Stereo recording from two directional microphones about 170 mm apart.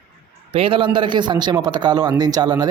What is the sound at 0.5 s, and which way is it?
A man's voice, 30° right (ahead or behind).